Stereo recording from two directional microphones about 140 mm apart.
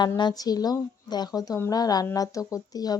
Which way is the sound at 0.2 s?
30° left (ahead or behind).